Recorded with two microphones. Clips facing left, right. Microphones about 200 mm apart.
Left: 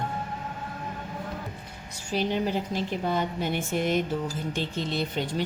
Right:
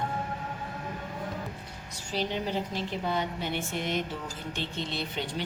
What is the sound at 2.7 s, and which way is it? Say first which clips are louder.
A woman's voice: left 3 dB; 45° left (ahead or behind).